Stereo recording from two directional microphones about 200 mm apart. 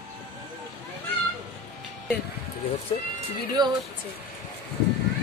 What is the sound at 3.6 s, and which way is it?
Speech, 20° right (ahead or behind).